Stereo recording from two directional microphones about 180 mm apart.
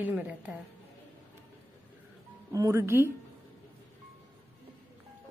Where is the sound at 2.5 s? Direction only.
15° right (ahead or behind).